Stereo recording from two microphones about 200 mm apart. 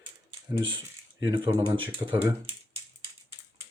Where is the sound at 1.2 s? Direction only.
20° right (ahead or behind).